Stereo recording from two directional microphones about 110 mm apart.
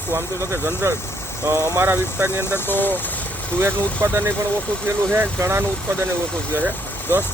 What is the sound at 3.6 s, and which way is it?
Speech, 20° right (ahead or behind).